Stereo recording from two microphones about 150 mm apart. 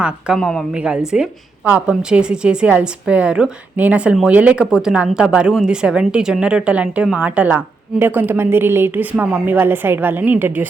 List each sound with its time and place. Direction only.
0.0 s a woman's voice: centre (ahead or behind)